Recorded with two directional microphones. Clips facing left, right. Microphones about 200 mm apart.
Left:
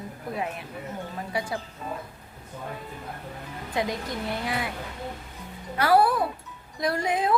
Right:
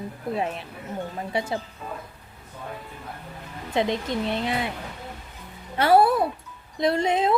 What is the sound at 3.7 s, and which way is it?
Speech, 25° right (ahead or behind).